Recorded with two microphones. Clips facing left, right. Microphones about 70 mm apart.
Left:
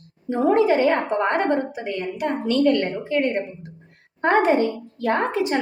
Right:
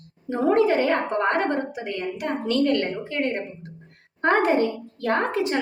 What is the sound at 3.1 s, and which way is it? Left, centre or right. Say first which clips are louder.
Speech: left 7 dB; left.